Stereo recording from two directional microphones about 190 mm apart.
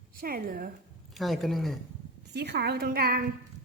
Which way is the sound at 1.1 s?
Centre (ahead or behind).